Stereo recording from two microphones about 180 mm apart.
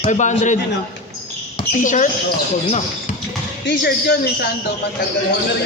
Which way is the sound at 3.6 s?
70° left (ahead or behind).